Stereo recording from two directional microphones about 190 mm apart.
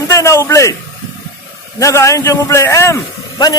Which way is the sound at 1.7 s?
15° left (ahead or behind).